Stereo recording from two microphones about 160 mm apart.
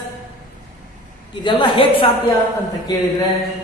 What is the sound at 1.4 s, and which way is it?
Speech, 30° left (ahead or behind).